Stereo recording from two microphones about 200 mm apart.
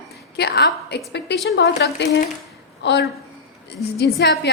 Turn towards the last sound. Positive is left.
turn(degrees=60)  # may be behind; listen again after turning